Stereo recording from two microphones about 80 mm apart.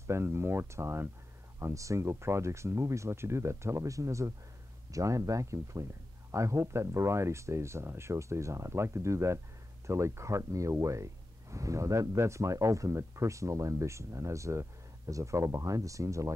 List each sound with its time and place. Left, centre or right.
0.0 s speech: right